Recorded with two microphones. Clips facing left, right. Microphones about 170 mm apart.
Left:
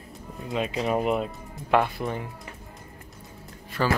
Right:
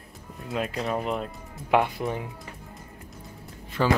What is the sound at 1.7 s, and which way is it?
Speech, 15° right (ahead or behind).